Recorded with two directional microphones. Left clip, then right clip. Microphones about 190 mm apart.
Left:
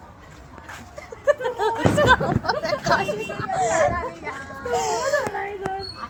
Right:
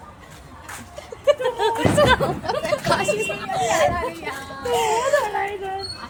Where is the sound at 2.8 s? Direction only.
30° right (ahead or behind).